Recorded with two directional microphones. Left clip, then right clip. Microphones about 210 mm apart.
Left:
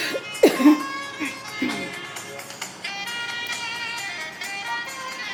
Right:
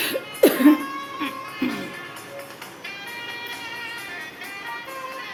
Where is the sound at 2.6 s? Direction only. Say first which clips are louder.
Left 4 dB; 50° left (ahead or behind).